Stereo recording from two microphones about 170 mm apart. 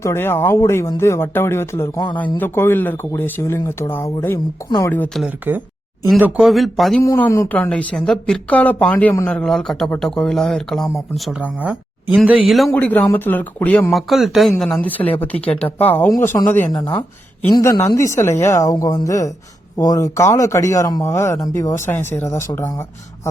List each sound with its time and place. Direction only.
0.0 s a woman's voice: 15° left (ahead or behind)
6.1 s speech: 10° right (ahead or behind)
7.0 s a woman's voice: 15° left (ahead or behind)
17.5 s a woman's voice: 20° left (ahead or behind)